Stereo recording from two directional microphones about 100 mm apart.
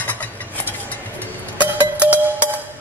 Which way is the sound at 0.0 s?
15° left (ahead or behind).